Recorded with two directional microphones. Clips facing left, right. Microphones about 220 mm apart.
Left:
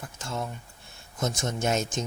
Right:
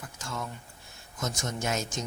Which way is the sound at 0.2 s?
25° left (ahead or behind).